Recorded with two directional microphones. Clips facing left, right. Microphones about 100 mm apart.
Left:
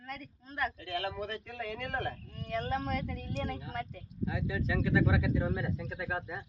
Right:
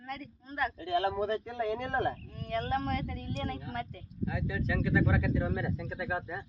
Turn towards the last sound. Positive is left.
turn(degrees=0)  # may be behind; listen again after turning